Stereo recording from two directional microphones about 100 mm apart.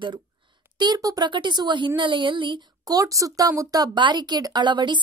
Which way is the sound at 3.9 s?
50° right (ahead or behind).